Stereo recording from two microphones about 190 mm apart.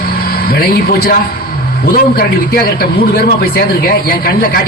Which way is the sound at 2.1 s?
50° left (ahead or behind).